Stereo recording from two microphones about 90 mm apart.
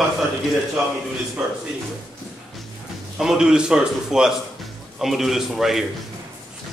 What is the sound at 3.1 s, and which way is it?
A man's voice, 5° right (ahead or behind).